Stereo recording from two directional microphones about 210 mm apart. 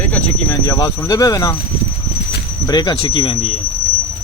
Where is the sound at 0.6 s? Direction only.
15° left (ahead or behind).